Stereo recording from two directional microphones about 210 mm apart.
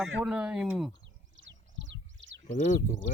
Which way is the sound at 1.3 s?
60° right (ahead or behind).